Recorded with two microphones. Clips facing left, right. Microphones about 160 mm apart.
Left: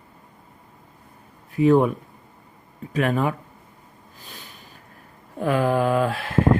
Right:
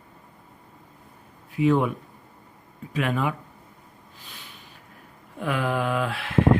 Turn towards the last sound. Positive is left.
turn(degrees=40)  # may be behind; listen again after turning